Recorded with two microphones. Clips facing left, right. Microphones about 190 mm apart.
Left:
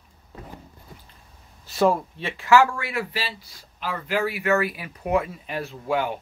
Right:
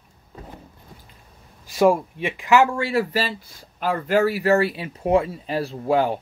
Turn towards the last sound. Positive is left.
turn(degrees=-35)  # may be behind; listen again after turning